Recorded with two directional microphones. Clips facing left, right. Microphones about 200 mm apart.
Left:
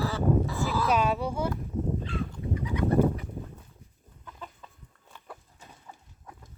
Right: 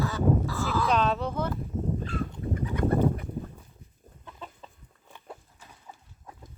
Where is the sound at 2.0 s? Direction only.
50° right (ahead or behind).